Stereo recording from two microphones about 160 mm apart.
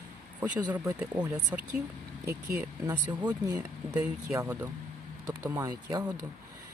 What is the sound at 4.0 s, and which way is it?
Speech, 10° right (ahead or behind).